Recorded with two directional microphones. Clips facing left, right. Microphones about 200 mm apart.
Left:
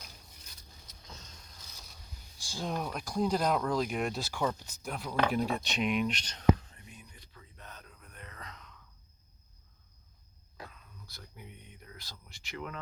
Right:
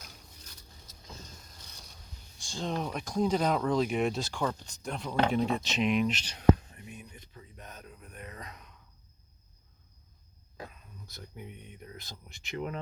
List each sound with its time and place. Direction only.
1.0 s vehicle: 10° right (ahead or behind)
1.6 s mechanisms: centre (ahead or behind)
2.4 s speech: 5° left (ahead or behind)
6.7 s a sound: 20° right (ahead or behind)
10.6 s speech: 20° right (ahead or behind)